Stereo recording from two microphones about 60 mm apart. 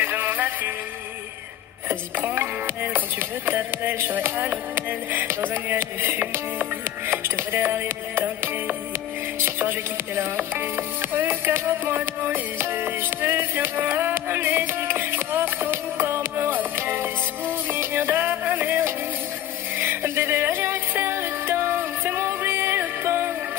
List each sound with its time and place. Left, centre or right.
0.0 s music: right
1.9 s music: right